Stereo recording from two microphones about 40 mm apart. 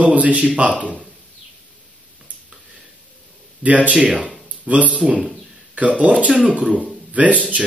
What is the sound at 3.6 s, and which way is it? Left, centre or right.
A man's voice, right.